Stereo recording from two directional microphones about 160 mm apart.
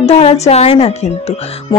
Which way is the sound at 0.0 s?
40° left (ahead or behind).